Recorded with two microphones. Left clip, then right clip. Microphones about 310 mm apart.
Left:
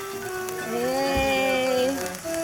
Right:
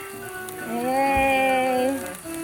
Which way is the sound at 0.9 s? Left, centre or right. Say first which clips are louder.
Right 5 dB; centre.